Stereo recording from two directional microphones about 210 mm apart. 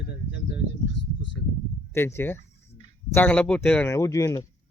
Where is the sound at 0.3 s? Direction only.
55° left (ahead or behind).